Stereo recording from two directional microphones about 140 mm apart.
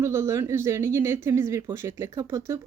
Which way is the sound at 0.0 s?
20° right (ahead or behind).